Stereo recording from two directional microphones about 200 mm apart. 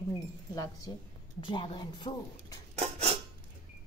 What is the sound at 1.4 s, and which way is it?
A woman's voice, 25° left (ahead or behind).